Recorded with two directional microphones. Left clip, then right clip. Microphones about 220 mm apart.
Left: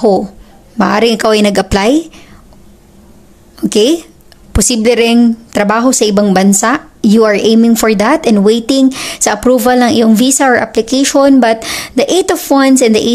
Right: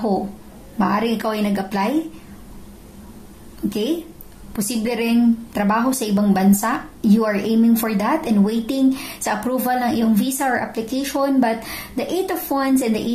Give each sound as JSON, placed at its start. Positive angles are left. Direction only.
{"t": 0.7, "sound": "a woman's voice", "side_deg": 50}
{"t": 3.6, "sound": "a woman's voice", "side_deg": 45}